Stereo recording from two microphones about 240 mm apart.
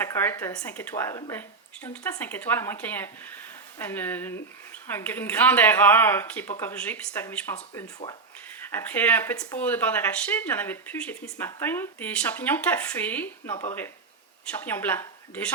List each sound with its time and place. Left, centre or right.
0.0 s speech: centre